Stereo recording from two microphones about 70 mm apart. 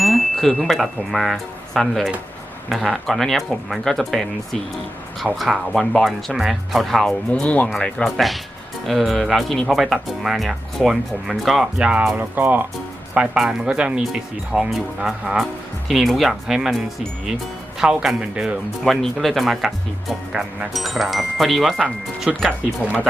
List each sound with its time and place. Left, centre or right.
0.0 s speech: centre
7.4 s speech: left
8.1 s speech: centre
11.8 s speech: centre
12.1 s speech: right
13.1 s speech: centre